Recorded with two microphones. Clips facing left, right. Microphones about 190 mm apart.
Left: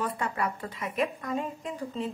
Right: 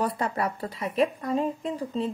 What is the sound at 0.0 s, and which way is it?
Speech, 35° right (ahead or behind).